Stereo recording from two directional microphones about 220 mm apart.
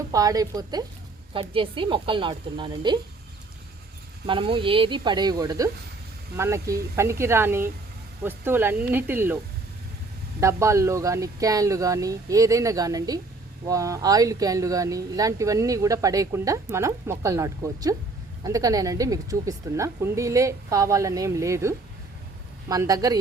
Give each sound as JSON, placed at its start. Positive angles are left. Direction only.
{"t": 0.1, "sound": "speech", "side_deg": -15}
{"t": 4.3, "sound": "speech", "side_deg": -25}
{"t": 10.4, "sound": "speech", "side_deg": -15}